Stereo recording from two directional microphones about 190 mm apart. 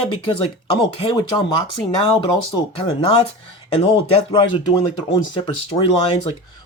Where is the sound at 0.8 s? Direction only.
25° left (ahead or behind).